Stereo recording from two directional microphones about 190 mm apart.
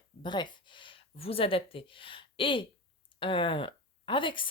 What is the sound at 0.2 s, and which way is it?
Speech, 25° left (ahead or behind).